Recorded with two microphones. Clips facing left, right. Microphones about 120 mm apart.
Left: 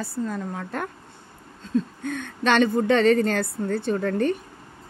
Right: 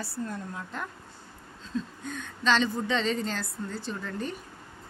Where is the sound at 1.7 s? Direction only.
65° left (ahead or behind).